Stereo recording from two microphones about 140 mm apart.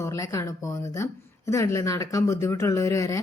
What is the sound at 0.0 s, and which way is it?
A woman's voice, 25° left (ahead or behind).